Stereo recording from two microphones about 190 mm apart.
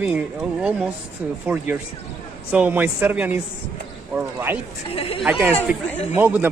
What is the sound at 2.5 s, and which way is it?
Speech, 10° right (ahead or behind).